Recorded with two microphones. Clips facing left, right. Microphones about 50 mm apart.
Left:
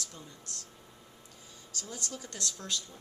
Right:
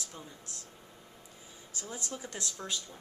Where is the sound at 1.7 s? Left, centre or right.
Centre.